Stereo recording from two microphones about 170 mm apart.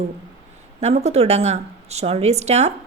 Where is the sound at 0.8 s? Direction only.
40° right (ahead or behind).